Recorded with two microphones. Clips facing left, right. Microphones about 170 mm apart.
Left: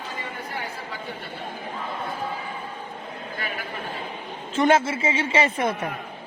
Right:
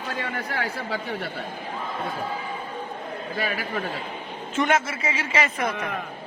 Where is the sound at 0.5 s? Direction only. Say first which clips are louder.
Right 4 dB; 80° right.